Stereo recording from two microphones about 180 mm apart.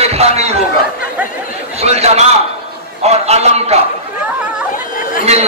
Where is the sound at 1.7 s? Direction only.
35° right (ahead or behind).